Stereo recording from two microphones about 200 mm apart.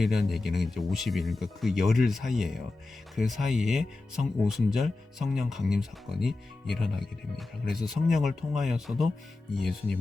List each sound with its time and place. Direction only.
0.0 s speech: centre (ahead or behind)